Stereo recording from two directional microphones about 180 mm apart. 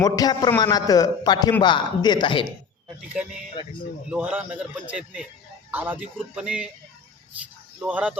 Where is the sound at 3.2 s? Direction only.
5° right (ahead or behind).